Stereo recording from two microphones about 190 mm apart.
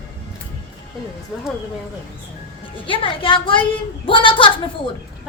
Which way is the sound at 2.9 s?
25° left (ahead or behind).